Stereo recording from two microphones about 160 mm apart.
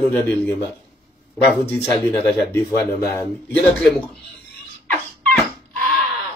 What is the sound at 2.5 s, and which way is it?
Speech, 10° left (ahead or behind).